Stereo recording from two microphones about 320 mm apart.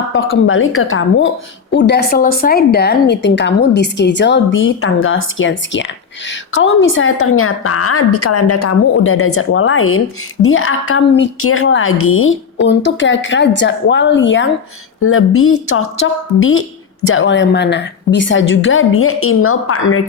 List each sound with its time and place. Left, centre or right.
0.1 s a woman's voice: left